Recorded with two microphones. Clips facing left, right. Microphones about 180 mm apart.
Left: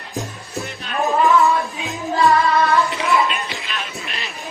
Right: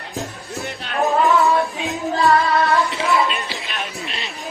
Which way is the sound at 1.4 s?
15° right (ahead or behind).